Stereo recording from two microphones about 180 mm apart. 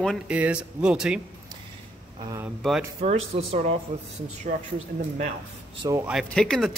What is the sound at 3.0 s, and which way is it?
Speech, 35° right (ahead or behind).